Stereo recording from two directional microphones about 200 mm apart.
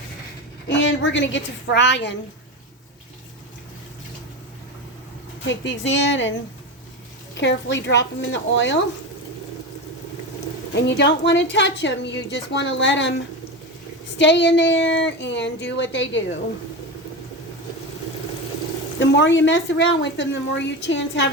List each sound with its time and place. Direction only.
0.7 s a woman's voice: 65° left (ahead or behind)
5.5 s a woman's voice: 65° left (ahead or behind)
7.3 s a woman's voice: 60° left (ahead or behind)
10.8 s a woman's voice: 60° left (ahead or behind)
14.2 s a woman's voice: 60° left (ahead or behind)
18.9 s a woman's voice: 65° left (ahead or behind)